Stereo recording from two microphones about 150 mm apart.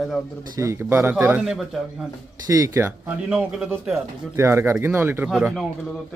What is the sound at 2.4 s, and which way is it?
Speech, 20° right (ahead or behind).